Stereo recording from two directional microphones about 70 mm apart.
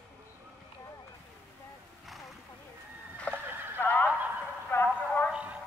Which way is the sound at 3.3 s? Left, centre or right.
Centre.